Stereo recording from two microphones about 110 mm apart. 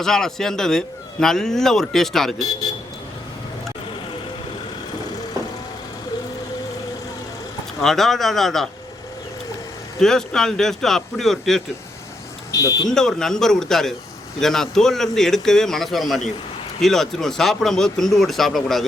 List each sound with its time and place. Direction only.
0.0 s a man's voice: 5° left (ahead or behind)
2.4 s speech: 35° left (ahead or behind)
7.8 s a man's voice: 5° left (ahead or behind)
10.0 s a man's voice: 5° left (ahead or behind)
12.5 s speech: 30° left (ahead or behind)
12.9 s a man's voice: 5° left (ahead or behind)